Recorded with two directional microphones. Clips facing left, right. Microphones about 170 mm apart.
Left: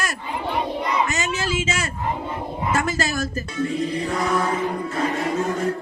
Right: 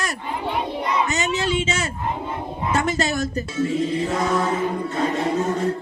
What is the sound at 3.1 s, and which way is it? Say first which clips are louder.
Speech: right 2 dB; 20° right (ahead or behind).